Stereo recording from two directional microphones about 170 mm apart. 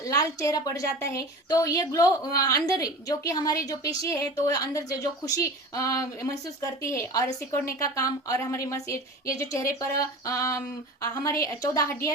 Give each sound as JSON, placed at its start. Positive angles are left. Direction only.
{"t": 0.0, "sound": "a woman's voice", "side_deg": 20}